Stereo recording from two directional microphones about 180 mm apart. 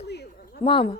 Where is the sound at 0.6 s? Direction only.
30° left (ahead or behind).